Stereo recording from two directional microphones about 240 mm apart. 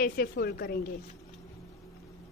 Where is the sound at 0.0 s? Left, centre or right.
Left.